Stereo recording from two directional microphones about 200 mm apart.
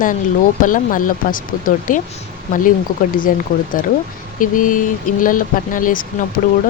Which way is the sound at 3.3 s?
40° left (ahead or behind).